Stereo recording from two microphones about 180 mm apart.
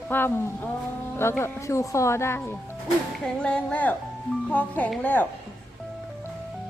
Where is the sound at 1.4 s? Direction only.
15° left (ahead or behind).